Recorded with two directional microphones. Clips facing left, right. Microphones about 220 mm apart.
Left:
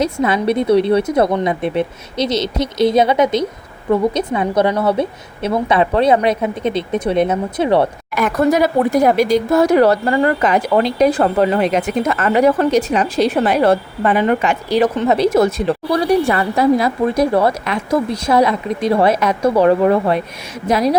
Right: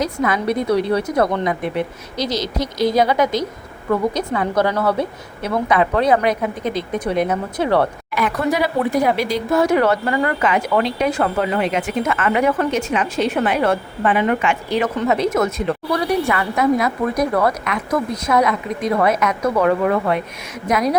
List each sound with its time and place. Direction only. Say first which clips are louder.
0.0 s a woman's voice: left 4 dB; 25° left (ahead or behind)
8.1 s a woman's voice: left 6 dB; 45° left (ahead or behind)